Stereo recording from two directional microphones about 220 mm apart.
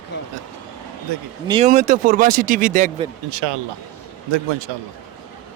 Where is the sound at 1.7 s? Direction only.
35° right (ahead or behind).